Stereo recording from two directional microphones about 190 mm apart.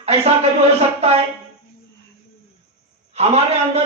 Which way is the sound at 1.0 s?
35° right (ahead or behind).